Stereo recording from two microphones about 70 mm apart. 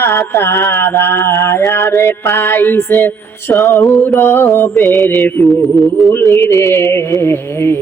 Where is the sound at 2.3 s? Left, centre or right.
Left.